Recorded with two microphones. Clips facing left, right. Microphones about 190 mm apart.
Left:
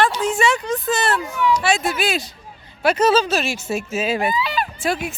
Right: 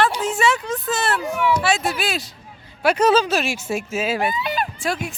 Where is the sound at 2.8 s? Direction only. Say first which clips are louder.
Even; 10° right (ahead or behind).